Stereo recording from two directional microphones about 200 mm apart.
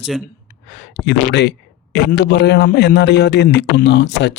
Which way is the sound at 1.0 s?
60° left (ahead or behind).